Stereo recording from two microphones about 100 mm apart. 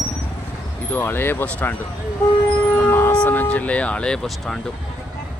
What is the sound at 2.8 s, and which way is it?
Siren, 20° left (ahead or behind).